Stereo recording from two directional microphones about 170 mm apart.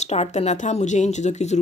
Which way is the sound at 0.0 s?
40° left (ahead or behind).